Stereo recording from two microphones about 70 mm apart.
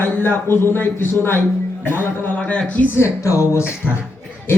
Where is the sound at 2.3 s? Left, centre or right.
Centre.